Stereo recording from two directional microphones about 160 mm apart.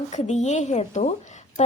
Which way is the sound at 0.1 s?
45° left (ahead or behind).